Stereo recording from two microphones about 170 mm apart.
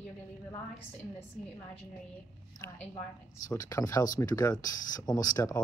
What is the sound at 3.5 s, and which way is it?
Speech, 20° left (ahead or behind).